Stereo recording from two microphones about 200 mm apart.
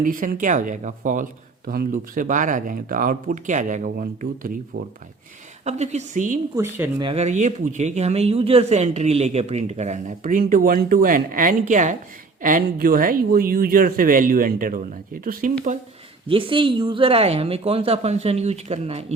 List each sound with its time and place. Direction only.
0.0 s speech: 40° right (ahead or behind)
5.6 s speech: 35° right (ahead or behind)
6.6 s speech: 10° right (ahead or behind)
7.0 s speech: 30° right (ahead or behind)
16.3 s speech: 25° right (ahead or behind)